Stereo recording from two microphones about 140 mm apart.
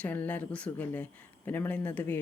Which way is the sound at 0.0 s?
10° left (ahead or behind).